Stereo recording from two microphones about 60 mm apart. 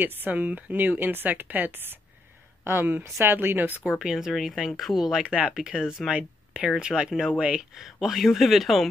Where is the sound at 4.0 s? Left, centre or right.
Centre.